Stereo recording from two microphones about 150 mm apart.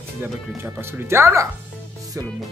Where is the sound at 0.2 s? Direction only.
15° right (ahead or behind).